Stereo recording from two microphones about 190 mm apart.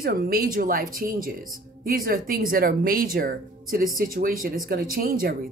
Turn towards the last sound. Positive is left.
turn(degrees=-50)  # may be behind; listen again after turning